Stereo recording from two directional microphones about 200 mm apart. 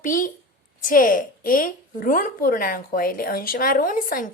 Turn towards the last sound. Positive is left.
turn(degrees=45)  # may be behind; listen again after turning